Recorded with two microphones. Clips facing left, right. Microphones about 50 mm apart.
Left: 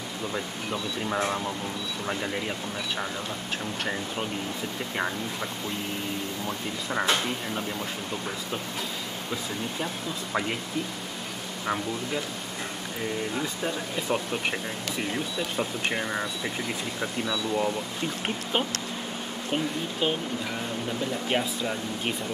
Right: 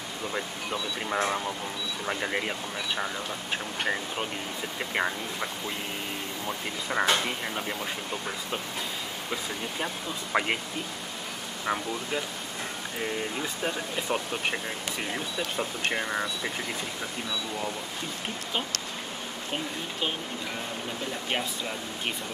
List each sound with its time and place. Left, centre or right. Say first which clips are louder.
0.3 s speech: even; centre
6.4 s speech: left 1 dB; centre
10.3 s speech: right 2 dB; right
11.6 s speech: left 1 dB; centre
14.0 s speech: left 2 dB; centre
21.3 s speech: left 3 dB; centre